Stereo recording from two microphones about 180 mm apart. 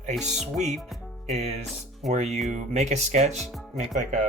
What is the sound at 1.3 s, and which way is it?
Speech, 40° right (ahead or behind).